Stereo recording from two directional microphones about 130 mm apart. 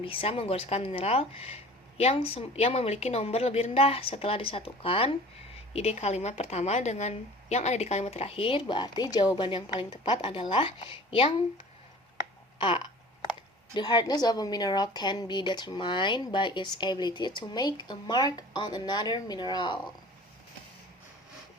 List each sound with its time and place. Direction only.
0.0 s a woman's voice: 45° left (ahead or behind)
9.3 s a woman's voice: 40° left (ahead or behind)
12.5 s a sound: 40° left (ahead or behind)
13.7 s a woman's voice: 30° left (ahead or behind)